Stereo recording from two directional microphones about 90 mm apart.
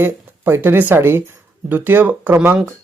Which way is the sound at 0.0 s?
25° right (ahead or behind).